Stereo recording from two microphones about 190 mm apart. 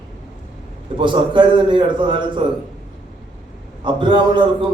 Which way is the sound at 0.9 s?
25° right (ahead or behind).